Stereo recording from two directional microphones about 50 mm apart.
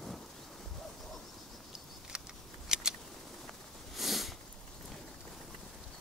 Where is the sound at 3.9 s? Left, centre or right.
Centre.